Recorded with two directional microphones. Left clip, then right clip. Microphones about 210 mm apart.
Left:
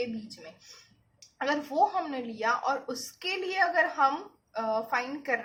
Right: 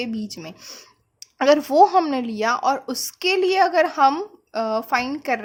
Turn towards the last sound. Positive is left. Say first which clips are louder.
# right 8 dB
turn(degrees=-50)  # may be behind; listen again after turning